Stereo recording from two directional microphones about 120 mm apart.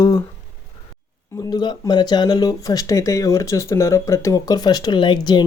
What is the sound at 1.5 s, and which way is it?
Speech, 35° left (ahead or behind).